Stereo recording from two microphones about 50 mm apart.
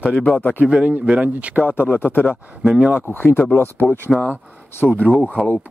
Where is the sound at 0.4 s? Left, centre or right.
Left.